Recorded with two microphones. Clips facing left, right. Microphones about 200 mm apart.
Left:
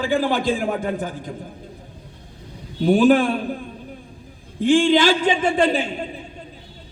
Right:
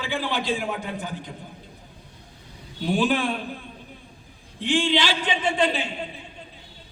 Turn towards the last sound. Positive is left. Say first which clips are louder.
# left 5 dB
turn(degrees=50)  # may be behind; listen again after turning